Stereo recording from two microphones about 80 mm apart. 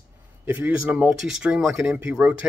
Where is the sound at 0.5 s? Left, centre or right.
Centre.